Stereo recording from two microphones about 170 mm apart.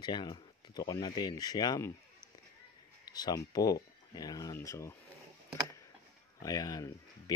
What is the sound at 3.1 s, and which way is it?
Speech, 20° left (ahead or behind).